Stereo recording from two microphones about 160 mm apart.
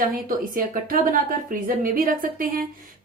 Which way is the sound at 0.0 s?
60° right (ahead or behind).